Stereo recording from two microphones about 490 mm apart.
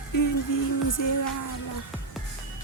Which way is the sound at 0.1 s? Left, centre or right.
Left.